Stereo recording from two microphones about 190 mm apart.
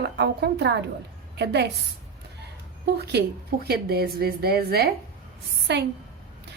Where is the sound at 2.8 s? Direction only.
60° right (ahead or behind).